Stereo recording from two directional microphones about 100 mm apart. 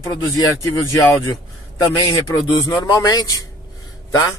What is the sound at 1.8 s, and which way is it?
Speech, 50° left (ahead or behind).